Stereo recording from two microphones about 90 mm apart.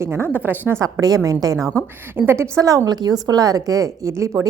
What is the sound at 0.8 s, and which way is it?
Speech, 40° right (ahead or behind).